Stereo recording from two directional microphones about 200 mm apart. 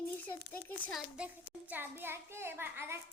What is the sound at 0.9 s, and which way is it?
A child's voice, 5° right (ahead or behind).